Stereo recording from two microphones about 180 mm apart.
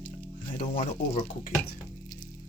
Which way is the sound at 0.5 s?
50° left (ahead or behind).